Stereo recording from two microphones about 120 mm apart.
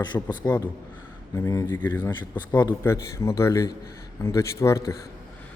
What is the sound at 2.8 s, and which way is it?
Speech, 25° left (ahead or behind).